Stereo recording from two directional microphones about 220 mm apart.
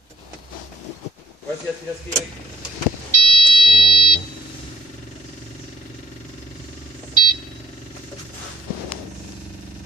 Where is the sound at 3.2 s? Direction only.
25° left (ahead or behind).